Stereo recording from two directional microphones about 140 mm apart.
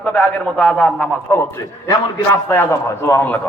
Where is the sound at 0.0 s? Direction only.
10° left (ahead or behind).